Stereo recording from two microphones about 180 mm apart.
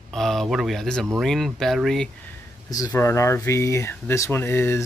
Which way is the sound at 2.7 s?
15° left (ahead or behind).